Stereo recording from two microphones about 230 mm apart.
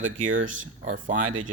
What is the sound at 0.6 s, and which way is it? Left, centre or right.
Speech, right.